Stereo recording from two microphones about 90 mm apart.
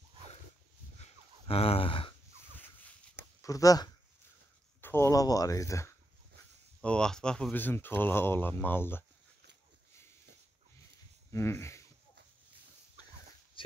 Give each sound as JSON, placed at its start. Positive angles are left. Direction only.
{"t": 1.5, "sound": "a sound", "side_deg": 90}
{"t": 3.4, "sound": "speech", "side_deg": 40}
{"t": 4.8, "sound": "a sound", "side_deg": 30}
{"t": 5.1, "sound": "speech", "side_deg": 40}
{"t": 6.8, "sound": "speech", "side_deg": 10}
{"t": 7.5, "sound": "speech", "side_deg": 20}
{"t": 11.3, "sound": "speech", "side_deg": 30}
{"t": 13.6, "sound": "dog", "side_deg": 80}